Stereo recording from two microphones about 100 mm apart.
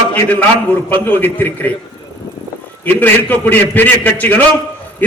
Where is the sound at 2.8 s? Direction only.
20° left (ahead or behind).